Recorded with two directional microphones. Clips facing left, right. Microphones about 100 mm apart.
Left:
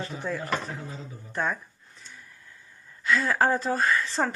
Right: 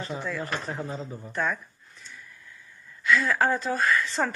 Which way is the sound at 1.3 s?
25° left (ahead or behind).